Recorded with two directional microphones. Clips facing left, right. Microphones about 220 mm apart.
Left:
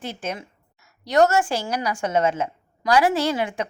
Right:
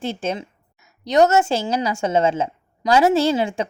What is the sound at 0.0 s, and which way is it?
A woman's voice, 25° right (ahead or behind).